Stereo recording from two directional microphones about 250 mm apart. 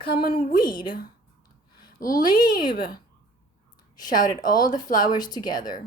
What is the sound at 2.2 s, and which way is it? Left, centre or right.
Speech, centre.